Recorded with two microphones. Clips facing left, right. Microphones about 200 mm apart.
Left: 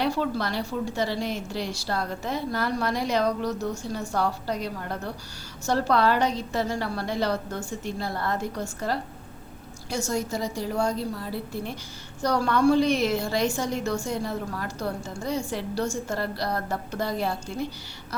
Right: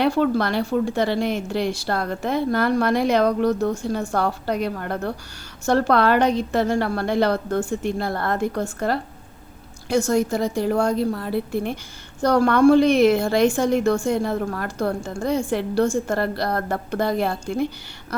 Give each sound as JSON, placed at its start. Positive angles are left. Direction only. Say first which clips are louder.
{"t": 0.0, "sound": "a woman's voice", "louder": "right 7 dB", "side_deg": -60}